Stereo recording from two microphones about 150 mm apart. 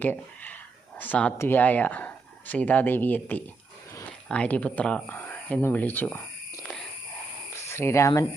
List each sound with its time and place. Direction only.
0.0 s speech: 10° left (ahead or behind)
6.6 s a sound: 5° left (ahead or behind)
7.5 s speech: 15° left (ahead or behind)